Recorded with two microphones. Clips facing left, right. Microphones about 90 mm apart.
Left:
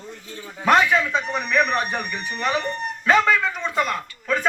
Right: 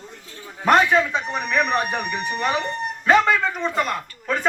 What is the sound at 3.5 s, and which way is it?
Speech, 30° right (ahead or behind).